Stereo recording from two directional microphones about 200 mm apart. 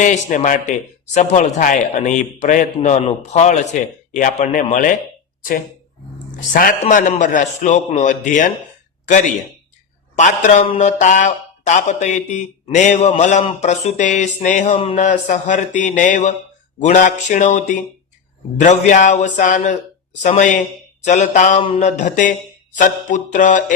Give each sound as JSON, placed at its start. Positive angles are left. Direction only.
{"t": 0.0, "sound": "speech", "side_deg": 40}
{"t": 6.5, "sound": "speech", "side_deg": 45}
{"t": 10.2, "sound": "speech", "side_deg": 35}